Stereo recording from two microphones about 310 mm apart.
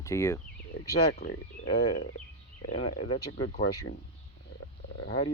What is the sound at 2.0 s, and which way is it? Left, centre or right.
Speech, left.